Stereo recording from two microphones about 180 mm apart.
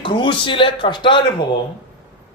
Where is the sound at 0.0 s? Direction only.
25° left (ahead or behind).